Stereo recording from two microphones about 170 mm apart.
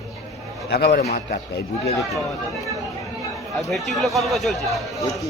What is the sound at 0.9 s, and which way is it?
Speech, 55° left (ahead or behind).